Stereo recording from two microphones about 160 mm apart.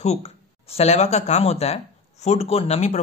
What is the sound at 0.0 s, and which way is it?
Speech, 45° left (ahead or behind).